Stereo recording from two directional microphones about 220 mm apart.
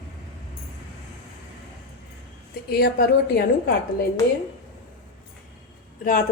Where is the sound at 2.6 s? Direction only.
45° left (ahead or behind).